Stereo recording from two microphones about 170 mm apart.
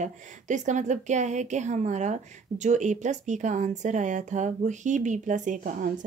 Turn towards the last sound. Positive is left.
turn(degrees=-50)  # may be behind; listen again after turning